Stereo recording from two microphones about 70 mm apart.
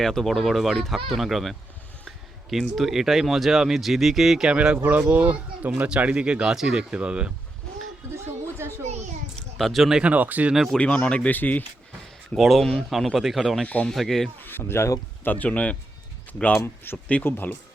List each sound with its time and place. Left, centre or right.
0.0 s speech: centre
4.4 s speech: centre
8.1 s a sound: right
9.6 s speech: centre
9.9 s speech: centre
10.5 s speech: centre
10.8 s speech: centre
12.4 s speech: centre
14.4 s speech: left
15.3 s speech: left
16.6 s speech: left